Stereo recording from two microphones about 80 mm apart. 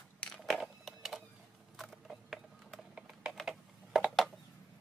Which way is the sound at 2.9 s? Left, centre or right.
Centre.